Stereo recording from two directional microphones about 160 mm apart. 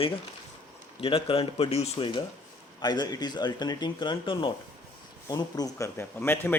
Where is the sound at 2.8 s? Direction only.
25° left (ahead or behind).